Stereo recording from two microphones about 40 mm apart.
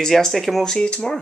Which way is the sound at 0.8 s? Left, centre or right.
Left.